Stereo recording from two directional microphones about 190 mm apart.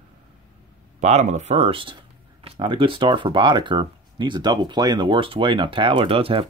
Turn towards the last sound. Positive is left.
turn(degrees=-30)  # may be behind; listen again after turning